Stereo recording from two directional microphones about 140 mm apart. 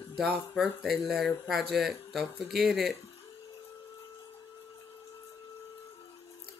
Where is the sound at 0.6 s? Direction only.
Centre (ahead or behind).